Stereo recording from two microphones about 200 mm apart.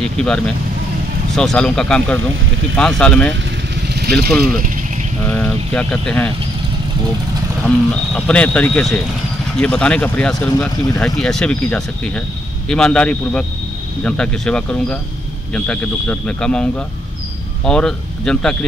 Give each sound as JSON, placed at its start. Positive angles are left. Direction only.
{"t": 0.0, "sound": "speech", "side_deg": 5}
{"t": 5.2, "sound": "speech", "side_deg": 10}
{"t": 7.6, "sound": "speech", "side_deg": 5}